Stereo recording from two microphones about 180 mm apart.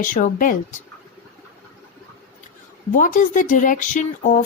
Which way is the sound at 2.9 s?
45° left (ahead or behind).